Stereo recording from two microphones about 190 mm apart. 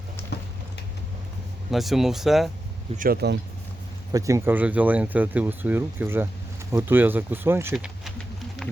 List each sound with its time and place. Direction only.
1.7 s speech: centre (ahead or behind)
3.0 s speech: 55° right (ahead or behind)
4.1 s speech: 15° right (ahead or behind)
8.6 s music: centre (ahead or behind)